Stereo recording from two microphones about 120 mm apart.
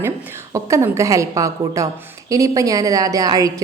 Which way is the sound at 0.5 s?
25° right (ahead or behind).